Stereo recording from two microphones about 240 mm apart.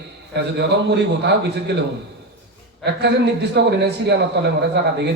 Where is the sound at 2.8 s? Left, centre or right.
Right.